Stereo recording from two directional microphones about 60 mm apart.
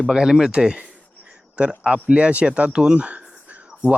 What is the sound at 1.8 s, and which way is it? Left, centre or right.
Speech, right.